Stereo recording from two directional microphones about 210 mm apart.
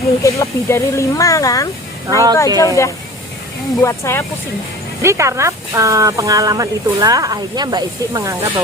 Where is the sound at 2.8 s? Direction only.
15° left (ahead or behind).